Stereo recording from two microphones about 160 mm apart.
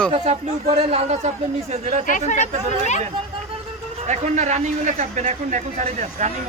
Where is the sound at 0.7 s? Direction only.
40° right (ahead or behind).